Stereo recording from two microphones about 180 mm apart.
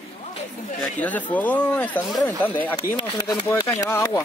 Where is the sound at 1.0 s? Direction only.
10° left (ahead or behind).